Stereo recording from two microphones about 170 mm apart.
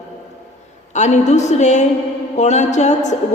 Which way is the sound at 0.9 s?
45° left (ahead or behind).